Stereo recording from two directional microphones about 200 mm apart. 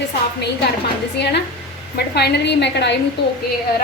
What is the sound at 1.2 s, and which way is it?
A woman's voice, 60° left (ahead or behind).